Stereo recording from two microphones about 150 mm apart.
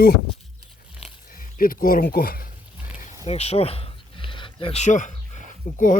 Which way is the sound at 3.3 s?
45° left (ahead or behind).